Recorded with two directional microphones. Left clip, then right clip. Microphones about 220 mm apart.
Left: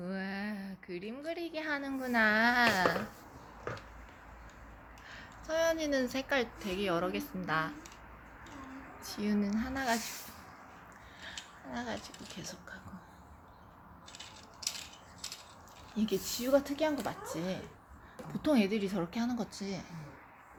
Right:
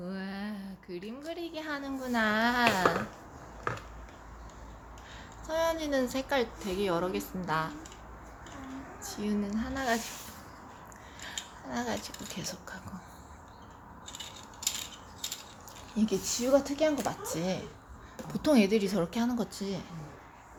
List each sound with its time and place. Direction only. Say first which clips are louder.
0.0 s a sound: left 1 dB; 20° left (ahead or behind)
5.5 s a woman's voice: right 1 dB; centre (ahead or behind)
9.0 s speech: even; 15° left (ahead or behind)
11.2 s speech: right 5 dB; 5° right (ahead or behind)
16.0 s a woman's voice: right 4 dB; centre (ahead or behind)